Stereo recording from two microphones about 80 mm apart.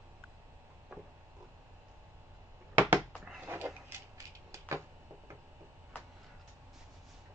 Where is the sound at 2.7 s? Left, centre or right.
Right.